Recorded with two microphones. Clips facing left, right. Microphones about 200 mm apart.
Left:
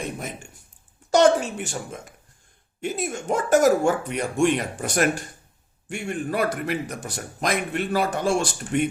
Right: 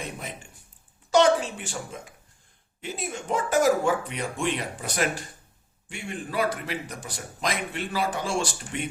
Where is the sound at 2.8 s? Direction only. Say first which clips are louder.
Left 6 dB; 45° left (ahead or behind).